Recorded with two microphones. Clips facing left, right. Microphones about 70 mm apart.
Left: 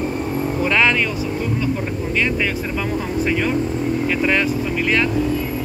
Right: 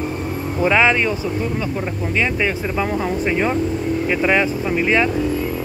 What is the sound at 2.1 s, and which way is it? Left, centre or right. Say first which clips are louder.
Speech: right 1 dB; centre.